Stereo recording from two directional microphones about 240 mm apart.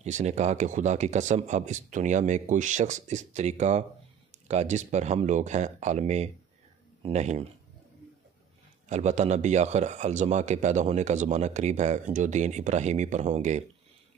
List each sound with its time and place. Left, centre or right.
0.0 s speech: right
8.8 s speech: right